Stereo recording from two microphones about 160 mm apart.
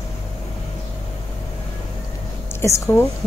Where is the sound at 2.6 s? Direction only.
15° left (ahead or behind).